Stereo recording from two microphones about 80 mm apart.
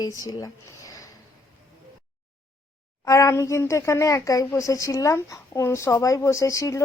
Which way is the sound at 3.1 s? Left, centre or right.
Left.